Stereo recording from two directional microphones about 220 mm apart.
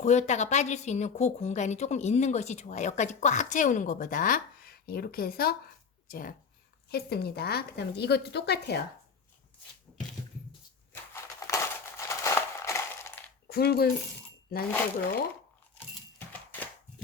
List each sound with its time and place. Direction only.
0.0 s a woman's voice: 30° left (ahead or behind); by 8.8 s 50° left (ahead or behind)
11.1 s crumpling: 15° left (ahead or behind)
13.5 s a woman's voice: 45° left (ahead or behind)
16.1 s a sound: 5° left (ahead or behind)